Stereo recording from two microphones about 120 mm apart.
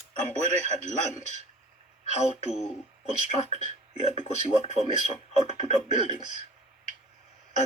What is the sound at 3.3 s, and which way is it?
Speech, 65° left (ahead or behind).